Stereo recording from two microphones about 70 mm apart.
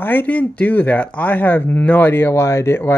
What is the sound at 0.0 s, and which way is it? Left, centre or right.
Speech, left.